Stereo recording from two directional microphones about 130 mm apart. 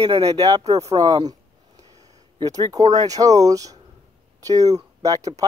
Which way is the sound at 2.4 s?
30° right (ahead or behind).